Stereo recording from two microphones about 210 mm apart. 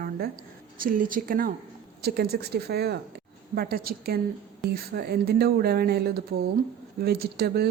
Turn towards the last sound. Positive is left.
turn(degrees=-50)  # may be behind; listen again after turning